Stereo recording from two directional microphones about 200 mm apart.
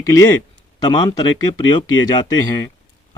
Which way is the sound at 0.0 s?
15° left (ahead or behind).